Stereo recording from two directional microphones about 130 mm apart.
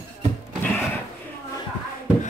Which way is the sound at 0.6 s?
10° left (ahead or behind).